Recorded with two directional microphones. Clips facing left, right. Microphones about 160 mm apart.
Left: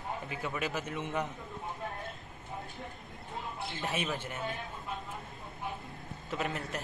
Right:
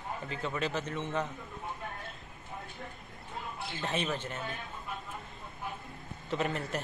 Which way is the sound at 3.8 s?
15° left (ahead or behind).